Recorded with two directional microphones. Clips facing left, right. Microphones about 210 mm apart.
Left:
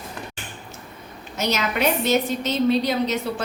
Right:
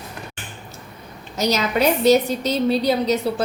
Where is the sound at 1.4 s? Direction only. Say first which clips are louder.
Right 4 dB; 35° right (ahead or behind).